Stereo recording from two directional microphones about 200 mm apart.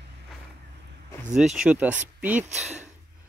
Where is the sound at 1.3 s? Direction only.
5° right (ahead or behind).